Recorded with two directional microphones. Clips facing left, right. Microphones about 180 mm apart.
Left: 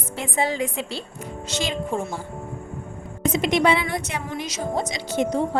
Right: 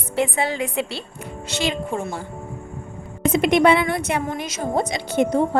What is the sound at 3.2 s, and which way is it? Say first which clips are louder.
A woman's voice: right 4 dB; 55° right (ahead or behind).